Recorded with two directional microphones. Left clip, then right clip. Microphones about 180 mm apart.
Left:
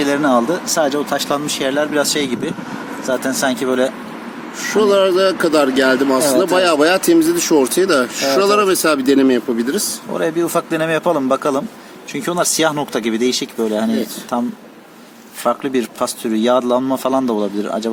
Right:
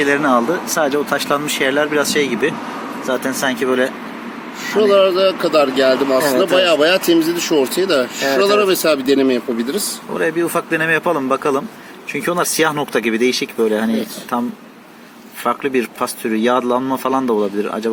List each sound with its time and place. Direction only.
0.8 s speech: 20° left (ahead or behind)
4.6 s speech: 50° left (ahead or behind)
10.2 s speech: 25° left (ahead or behind)
15.4 s speech: 20° left (ahead or behind)